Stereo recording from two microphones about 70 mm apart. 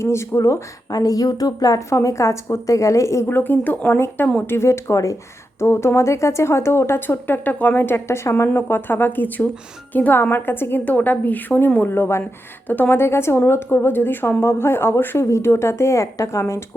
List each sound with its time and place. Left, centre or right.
0.0 s a woman's voice: left
0.9 s a woman's voice: left
3.2 s a woman's voice: left
3.9 s a woman's voice: left